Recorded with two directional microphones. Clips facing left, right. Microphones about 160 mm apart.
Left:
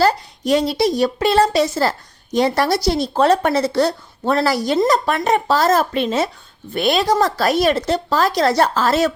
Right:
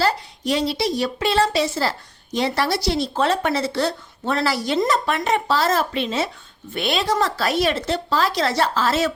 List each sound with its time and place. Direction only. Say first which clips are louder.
0.0 s a woman's voice: left 5 dB; 45° left (ahead or behind)